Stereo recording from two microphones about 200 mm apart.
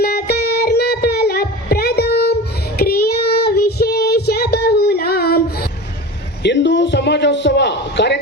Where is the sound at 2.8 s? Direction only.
50° left (ahead or behind).